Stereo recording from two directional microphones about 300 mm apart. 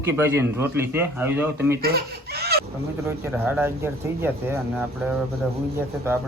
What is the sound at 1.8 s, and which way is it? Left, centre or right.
Speech, right.